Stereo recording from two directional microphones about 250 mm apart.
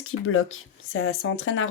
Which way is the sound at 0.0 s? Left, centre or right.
Left.